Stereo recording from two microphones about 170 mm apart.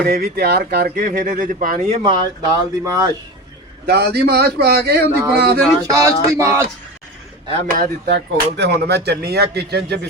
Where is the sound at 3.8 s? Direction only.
70° right (ahead or behind).